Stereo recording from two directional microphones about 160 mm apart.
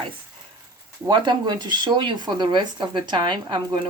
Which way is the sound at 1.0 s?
30° right (ahead or behind).